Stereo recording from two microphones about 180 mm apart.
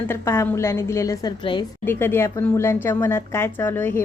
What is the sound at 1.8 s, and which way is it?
Speech, 10° left (ahead or behind).